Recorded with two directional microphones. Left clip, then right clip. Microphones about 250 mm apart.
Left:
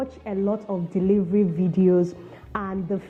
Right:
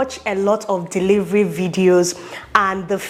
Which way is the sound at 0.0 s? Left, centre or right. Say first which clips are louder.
Right 8 dB; centre.